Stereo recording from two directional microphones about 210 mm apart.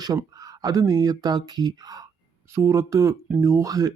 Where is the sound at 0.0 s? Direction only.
15° right (ahead or behind).